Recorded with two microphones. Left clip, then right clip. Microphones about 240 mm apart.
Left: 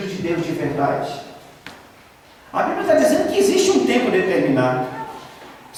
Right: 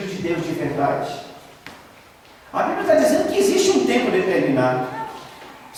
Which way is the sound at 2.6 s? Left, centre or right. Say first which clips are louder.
Left 1 dB; centre.